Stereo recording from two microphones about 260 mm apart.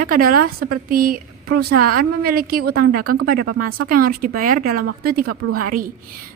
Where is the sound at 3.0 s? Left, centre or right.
Right.